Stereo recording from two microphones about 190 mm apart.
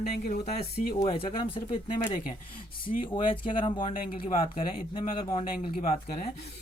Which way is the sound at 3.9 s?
50° left (ahead or behind).